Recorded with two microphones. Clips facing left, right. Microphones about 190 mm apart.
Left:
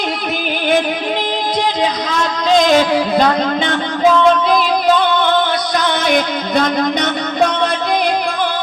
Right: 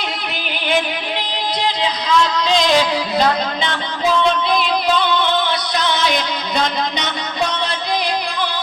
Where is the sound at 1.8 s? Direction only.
45° left (ahead or behind).